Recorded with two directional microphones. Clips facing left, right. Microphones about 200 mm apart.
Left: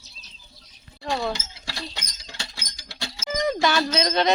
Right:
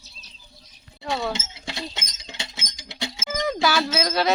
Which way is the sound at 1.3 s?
20° right (ahead or behind).